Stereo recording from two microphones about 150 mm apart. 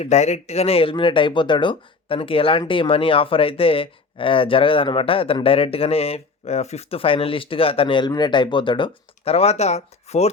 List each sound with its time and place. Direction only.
0.0 s speech: 50° left (ahead or behind)